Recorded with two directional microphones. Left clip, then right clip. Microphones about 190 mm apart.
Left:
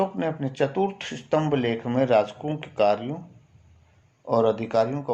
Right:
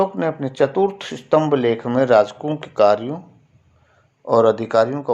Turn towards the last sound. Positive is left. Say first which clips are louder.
# right 6 dB
turn(degrees=-30)  # may be behind; listen again after turning